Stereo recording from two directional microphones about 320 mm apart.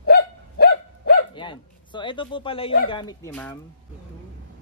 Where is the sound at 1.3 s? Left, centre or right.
Centre.